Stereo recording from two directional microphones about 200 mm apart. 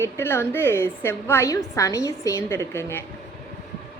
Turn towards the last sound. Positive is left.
turn(degrees=10)  # may be behind; listen again after turning